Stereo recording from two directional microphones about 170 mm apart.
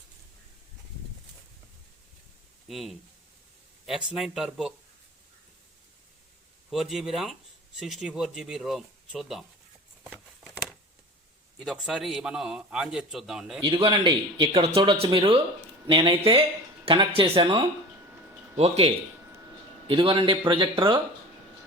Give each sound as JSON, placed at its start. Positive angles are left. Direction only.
{"t": 2.6, "sound": "a man's voice", "side_deg": 0}
{"t": 6.7, "sound": "a man's voice", "side_deg": 0}
{"t": 11.6, "sound": "a man's voice", "side_deg": 0}
{"t": 13.8, "sound": "speech", "side_deg": -30}
{"t": 19.9, "sound": "speech", "side_deg": -30}